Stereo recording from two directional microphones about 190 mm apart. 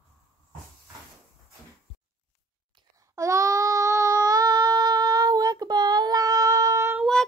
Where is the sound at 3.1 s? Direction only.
15° right (ahead or behind).